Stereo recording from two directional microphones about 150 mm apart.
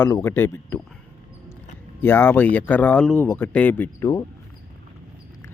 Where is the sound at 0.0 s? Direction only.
15° left (ahead or behind).